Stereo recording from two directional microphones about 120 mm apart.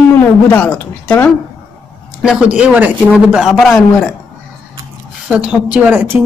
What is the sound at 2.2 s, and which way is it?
A man's voice, 5° right (ahead or behind).